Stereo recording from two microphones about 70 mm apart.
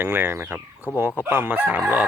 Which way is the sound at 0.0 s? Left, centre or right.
Right.